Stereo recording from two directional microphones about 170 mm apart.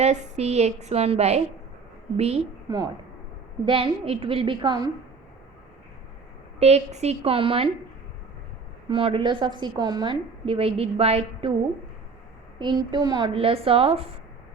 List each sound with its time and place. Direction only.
0.0 s a woman's voice: 40° right (ahead or behind)
2.6 s a woman's voice: 25° right (ahead or behind)
6.6 s a woman's voice: 40° right (ahead or behind)
8.9 s a woman's voice: 30° right (ahead or behind)
12.5 s a woman's voice: 25° right (ahead or behind)